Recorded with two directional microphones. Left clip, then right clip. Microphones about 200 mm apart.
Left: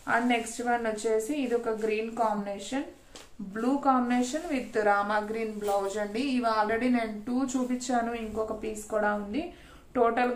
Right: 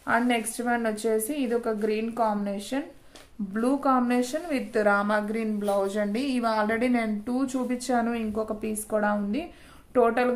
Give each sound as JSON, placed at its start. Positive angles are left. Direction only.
{"t": 0.0, "sound": "a woman's voice", "side_deg": -45}